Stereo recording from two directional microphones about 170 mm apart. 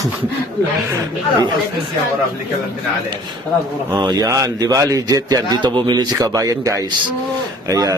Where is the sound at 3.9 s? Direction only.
25° right (ahead or behind).